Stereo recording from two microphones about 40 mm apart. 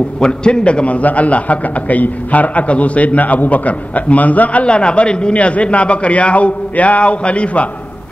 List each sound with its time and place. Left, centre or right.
0.2 s a man's voice: left
4.6 s a man's voice: left